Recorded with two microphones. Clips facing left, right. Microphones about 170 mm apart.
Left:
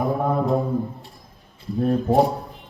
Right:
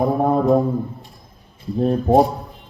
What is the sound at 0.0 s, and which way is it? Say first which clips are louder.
Mantra: right 5 dB; 20° right (ahead or behind).